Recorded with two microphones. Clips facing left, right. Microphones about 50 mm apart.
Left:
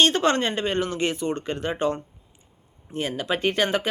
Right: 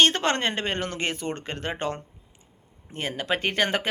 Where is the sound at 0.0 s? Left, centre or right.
Right.